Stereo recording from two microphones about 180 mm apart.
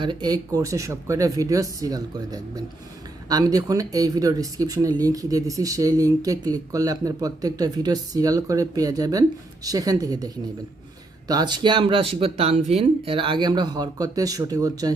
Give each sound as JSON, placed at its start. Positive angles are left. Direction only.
{"t": 0.0, "sound": "speech", "side_deg": -25}